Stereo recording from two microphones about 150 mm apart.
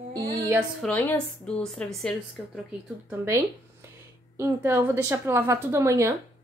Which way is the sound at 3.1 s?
20° right (ahead or behind).